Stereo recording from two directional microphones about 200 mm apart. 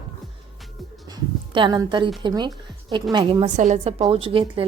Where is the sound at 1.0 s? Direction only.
20° right (ahead or behind).